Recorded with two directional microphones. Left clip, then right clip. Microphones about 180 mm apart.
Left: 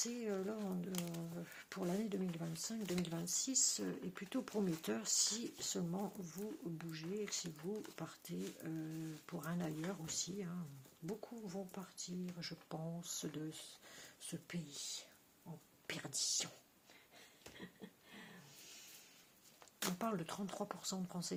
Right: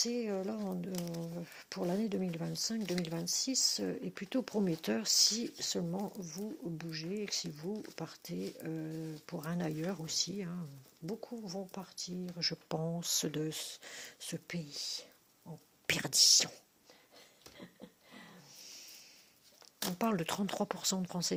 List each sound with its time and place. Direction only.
0.0 s speech: 30° right (ahead or behind)
15.9 s speech: 45° right (ahead or behind)
20.0 s speech: 40° right (ahead or behind)